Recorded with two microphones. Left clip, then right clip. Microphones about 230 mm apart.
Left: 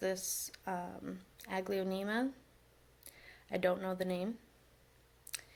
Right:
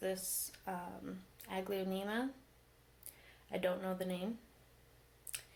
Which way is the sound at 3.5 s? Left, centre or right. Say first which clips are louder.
Left 3 dB; left.